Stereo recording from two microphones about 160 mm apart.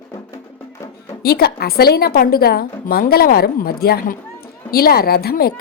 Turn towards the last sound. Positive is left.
turn(degrees=70)  # may be behind; listen again after turning